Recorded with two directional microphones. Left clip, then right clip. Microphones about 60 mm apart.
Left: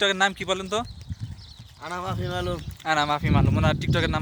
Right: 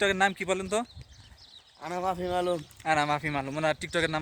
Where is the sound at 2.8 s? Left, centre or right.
Centre.